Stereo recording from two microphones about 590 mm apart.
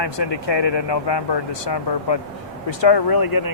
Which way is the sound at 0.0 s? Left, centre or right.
Left.